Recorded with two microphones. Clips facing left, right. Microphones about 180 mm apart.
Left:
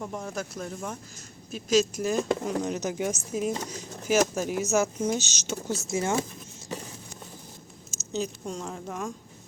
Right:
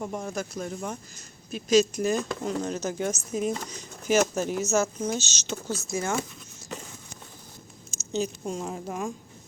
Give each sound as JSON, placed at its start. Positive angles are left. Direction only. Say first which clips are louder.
{"t": 0.0, "sound": "speech", "louder": "right 2 dB", "side_deg": -10}
{"t": 7.9, "sound": "speech", "louder": "right 2 dB", "side_deg": 0}